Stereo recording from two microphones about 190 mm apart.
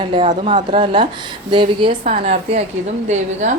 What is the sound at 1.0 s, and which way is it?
A woman's voice, 25° right (ahead or behind).